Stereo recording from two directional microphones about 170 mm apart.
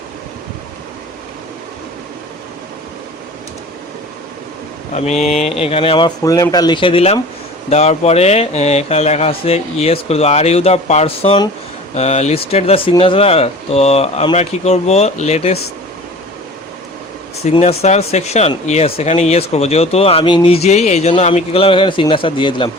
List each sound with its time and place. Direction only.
4.9 s speech: 40° left (ahead or behind)
17.4 s speech: 35° left (ahead or behind)